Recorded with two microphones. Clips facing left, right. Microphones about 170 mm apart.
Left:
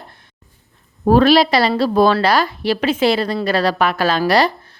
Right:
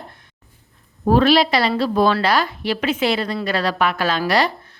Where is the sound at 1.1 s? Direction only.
40° left (ahead or behind).